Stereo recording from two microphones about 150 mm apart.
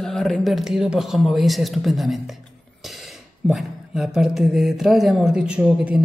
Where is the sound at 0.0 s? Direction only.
Centre (ahead or behind).